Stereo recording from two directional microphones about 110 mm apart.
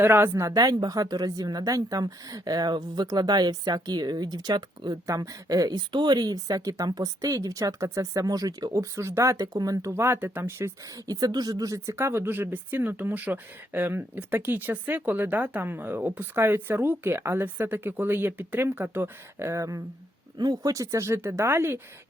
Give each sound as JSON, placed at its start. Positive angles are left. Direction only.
{"t": 0.0, "sound": "a woman's voice", "side_deg": -20}
{"t": 10.9, "sound": "speech", "side_deg": -35}